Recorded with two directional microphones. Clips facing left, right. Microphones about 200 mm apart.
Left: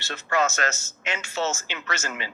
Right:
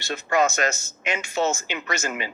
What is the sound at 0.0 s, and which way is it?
Speech, 15° right (ahead or behind).